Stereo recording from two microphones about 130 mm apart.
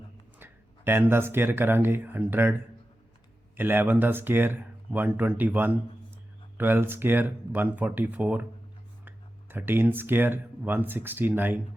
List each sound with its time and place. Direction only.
0.3 s speech: 15° right (ahead or behind)